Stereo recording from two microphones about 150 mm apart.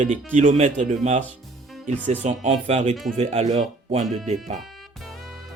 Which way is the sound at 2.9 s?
Centre (ahead or behind).